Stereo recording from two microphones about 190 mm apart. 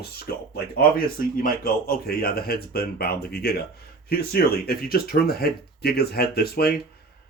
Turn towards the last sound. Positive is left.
turn(degrees=55)  # may be behind; listen again after turning